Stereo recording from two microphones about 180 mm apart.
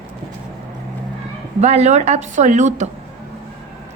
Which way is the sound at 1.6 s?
35° right (ahead or behind).